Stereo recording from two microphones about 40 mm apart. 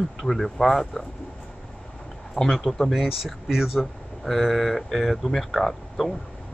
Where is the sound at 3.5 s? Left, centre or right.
Centre.